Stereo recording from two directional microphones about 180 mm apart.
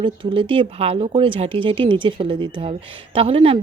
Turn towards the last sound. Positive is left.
turn(degrees=-30)  # may be behind; listen again after turning